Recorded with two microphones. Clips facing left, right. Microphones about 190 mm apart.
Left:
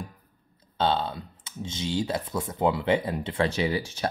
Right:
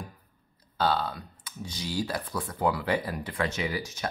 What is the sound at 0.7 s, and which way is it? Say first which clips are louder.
Speech: left 2 dB; 25° left (ahead or behind).